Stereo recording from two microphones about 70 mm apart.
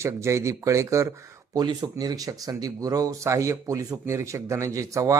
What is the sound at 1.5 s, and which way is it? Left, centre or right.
Speech, right.